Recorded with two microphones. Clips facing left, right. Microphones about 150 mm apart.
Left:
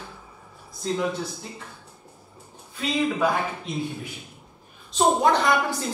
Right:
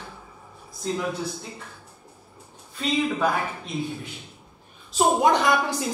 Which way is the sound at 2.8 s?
Centre (ahead or behind).